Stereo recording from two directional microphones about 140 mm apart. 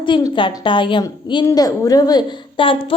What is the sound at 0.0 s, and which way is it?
A woman's voice, 30° left (ahead or behind).